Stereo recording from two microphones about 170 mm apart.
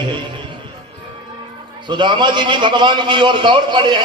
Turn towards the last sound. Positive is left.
turn(degrees=-30)  # may be behind; listen again after turning